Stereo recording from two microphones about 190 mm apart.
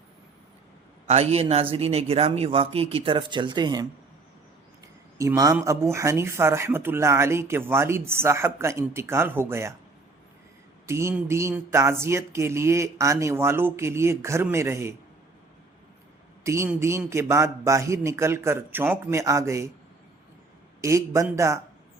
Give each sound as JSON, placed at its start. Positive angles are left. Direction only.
{"t": 1.0, "sound": "speech", "side_deg": -35}
{"t": 5.1, "sound": "speech", "side_deg": -15}
{"t": 10.8, "sound": "speech", "side_deg": -15}
{"t": 16.4, "sound": "speech", "side_deg": -15}
{"t": 20.8, "sound": "speech", "side_deg": -15}